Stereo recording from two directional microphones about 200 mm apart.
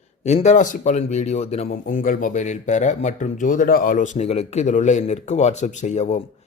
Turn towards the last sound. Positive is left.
turn(degrees=35)  # may be behind; listen again after turning